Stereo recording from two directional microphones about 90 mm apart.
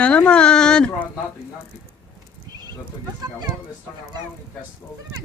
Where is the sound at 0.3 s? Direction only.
10° left (ahead or behind).